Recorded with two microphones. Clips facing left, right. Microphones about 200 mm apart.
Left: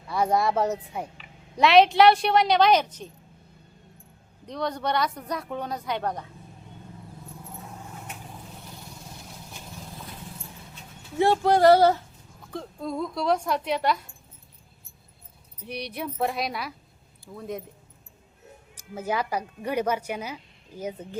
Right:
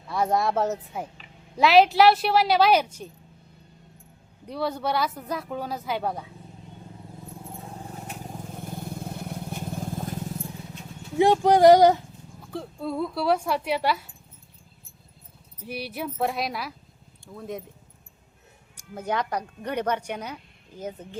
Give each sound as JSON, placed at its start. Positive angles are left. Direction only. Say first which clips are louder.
{"t": 0.1, "sound": "speech", "louder": "even", "side_deg": 0}
{"t": 4.4, "sound": "speech", "louder": "right 1 dB", "side_deg": -5}
{"t": 7.6, "sound": "vehicle", "louder": "right 3 dB", "side_deg": -35}
{"t": 11.2, "sound": "speech", "louder": "right 2 dB", "side_deg": -15}
{"t": 15.6, "sound": "speech", "louder": "right 1 dB", "side_deg": -5}
{"t": 18.8, "sound": "speech", "louder": "even", "side_deg": 5}